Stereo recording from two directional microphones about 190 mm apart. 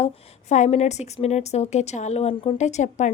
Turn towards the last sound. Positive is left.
turn(degrees=40)  # may be behind; listen again after turning